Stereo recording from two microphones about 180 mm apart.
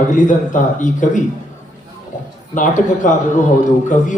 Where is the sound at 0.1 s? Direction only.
45° left (ahead or behind).